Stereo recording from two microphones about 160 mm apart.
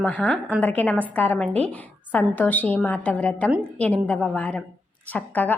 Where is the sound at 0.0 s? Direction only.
10° left (ahead or behind).